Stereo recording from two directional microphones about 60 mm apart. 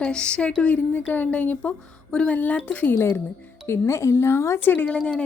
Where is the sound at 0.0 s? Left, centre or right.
Centre.